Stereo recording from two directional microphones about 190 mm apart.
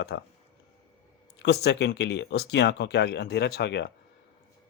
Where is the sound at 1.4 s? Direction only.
60° left (ahead or behind).